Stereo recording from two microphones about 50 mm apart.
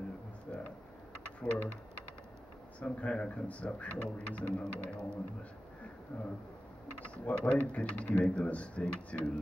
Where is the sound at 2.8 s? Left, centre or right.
Left.